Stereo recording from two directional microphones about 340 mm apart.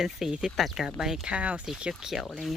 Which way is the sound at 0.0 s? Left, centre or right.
Centre.